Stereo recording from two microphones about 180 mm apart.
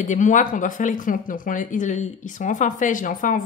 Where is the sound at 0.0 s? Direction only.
45° left (ahead or behind).